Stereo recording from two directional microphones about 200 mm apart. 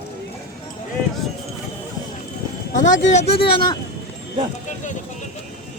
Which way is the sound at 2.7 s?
40° left (ahead or behind).